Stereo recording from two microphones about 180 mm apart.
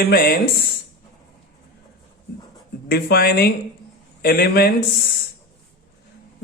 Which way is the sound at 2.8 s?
55° left (ahead or behind).